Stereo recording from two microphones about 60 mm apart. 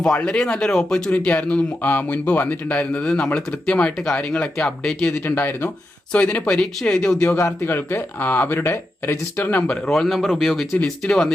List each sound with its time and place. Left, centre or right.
0.3 s speech: centre
1.1 s speech: left
5.2 s speech: left
6.1 s speech: left
6.5 s speech: centre
7.3 s speech: left
9.9 s speech: centre